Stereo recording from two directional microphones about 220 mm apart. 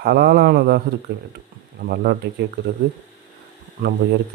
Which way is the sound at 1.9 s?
45° right (ahead or behind).